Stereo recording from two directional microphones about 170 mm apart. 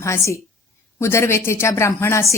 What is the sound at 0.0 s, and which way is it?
A woman's voice, 15° left (ahead or behind).